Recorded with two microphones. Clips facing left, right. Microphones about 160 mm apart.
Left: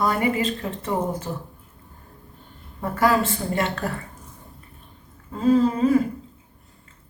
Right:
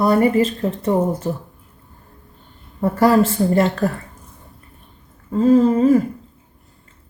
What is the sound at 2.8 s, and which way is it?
Speech, 30° right (ahead or behind).